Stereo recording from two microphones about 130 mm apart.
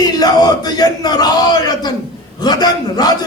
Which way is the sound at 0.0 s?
30° left (ahead or behind).